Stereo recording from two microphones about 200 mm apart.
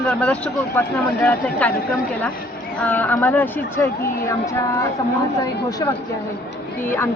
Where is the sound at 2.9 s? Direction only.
10° left (ahead or behind).